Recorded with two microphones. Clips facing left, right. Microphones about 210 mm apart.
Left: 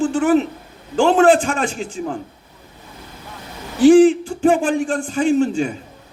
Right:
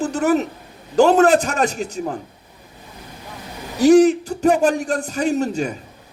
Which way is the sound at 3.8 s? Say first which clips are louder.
Left 2 dB; 40° right (ahead or behind).